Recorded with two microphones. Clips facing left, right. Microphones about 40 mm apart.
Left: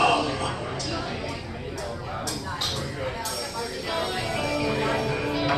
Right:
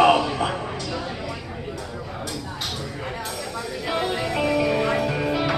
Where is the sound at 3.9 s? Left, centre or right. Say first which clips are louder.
Right 4 dB; right.